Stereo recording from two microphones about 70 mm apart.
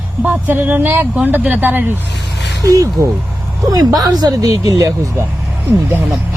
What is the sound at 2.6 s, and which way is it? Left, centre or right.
Speech, right.